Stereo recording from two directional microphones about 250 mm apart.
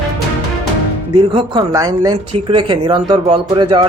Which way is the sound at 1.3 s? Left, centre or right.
Centre.